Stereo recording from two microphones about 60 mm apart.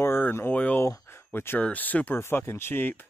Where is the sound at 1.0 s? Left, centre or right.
Left.